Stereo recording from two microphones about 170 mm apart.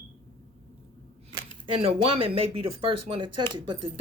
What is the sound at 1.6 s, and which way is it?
Speech, 35° right (ahead or behind).